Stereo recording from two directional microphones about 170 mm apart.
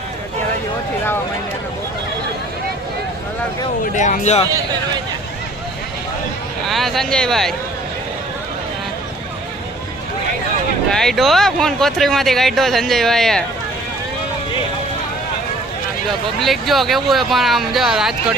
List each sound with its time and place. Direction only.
3.9 s speech: 45° left (ahead or behind)
6.7 s speech: centre (ahead or behind)
10.9 s speech: centre (ahead or behind)
16.4 s speech: centre (ahead or behind)